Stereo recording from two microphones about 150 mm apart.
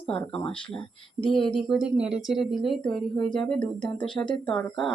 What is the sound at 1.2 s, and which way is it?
Speech, 35° left (ahead or behind).